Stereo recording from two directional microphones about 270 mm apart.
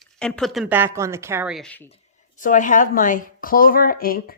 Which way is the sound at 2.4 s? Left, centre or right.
Left.